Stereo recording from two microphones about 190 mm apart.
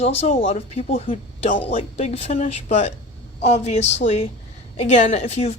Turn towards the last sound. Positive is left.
turn(degrees=35)  # may be behind; listen again after turning